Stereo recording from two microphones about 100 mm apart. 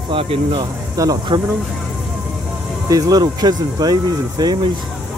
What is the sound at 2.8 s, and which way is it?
Speech, 35° right (ahead or behind).